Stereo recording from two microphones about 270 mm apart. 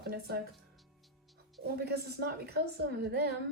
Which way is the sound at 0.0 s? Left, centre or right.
Right.